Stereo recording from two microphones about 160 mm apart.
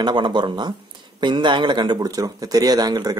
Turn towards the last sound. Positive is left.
turn(degrees=-25)  # may be behind; listen again after turning